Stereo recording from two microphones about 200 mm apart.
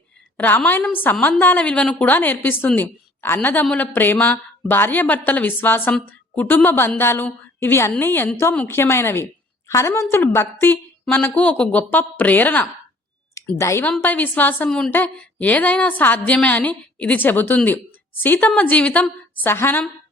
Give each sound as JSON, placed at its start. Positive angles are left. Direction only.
{"t": 0.3, "sound": "a woman's voice", "side_deg": 10}